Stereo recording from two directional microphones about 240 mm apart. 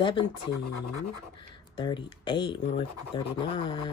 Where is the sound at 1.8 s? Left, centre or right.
Centre.